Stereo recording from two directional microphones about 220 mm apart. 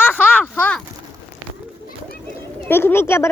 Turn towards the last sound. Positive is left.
turn(degrees=10)  # may be behind; listen again after turning